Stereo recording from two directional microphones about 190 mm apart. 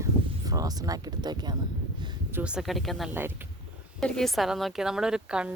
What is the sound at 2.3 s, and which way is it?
Speech, 10° right (ahead or behind).